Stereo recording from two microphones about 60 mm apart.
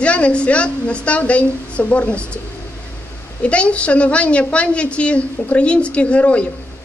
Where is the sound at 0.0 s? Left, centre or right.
Centre.